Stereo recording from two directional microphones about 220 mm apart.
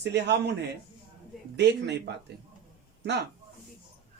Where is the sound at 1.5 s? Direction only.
50° right (ahead or behind).